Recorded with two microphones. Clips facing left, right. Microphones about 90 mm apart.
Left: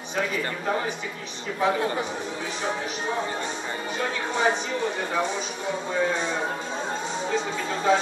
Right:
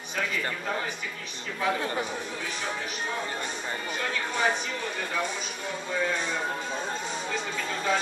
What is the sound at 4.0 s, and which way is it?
Speech, 20° left (ahead or behind).